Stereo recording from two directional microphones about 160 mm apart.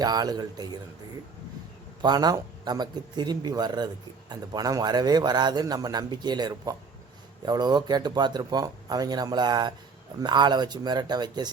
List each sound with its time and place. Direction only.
0.0 s a man's voice: 25° right (ahead or behind)
2.0 s a man's voice: 25° right (ahead or behind)